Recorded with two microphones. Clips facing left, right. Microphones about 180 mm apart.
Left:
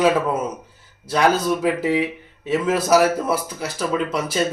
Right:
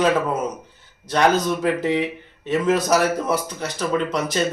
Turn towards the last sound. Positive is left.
turn(degrees=5)  # may be behind; listen again after turning